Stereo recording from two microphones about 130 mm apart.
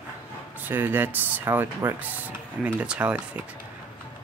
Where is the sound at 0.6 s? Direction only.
15° right (ahead or behind).